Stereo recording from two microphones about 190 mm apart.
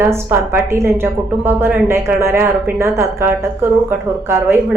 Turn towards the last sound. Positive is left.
turn(degrees=-15)  # may be behind; listen again after turning